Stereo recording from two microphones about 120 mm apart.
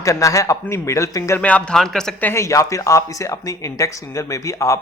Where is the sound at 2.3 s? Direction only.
25° left (ahead or behind).